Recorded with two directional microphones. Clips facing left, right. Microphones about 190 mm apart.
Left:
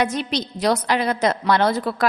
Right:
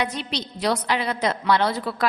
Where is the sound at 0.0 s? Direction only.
45° left (ahead or behind).